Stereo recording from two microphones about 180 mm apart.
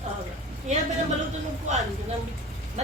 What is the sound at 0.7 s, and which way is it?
Speech, 40° right (ahead or behind).